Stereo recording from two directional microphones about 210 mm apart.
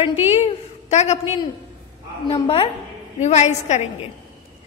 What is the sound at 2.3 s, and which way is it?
A woman's voice, 30° left (ahead or behind).